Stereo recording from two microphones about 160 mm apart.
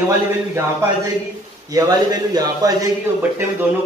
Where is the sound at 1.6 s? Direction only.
20° right (ahead or behind).